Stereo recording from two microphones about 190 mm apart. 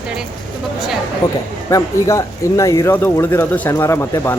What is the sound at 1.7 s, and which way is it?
A man's voice, 15° left (ahead or behind).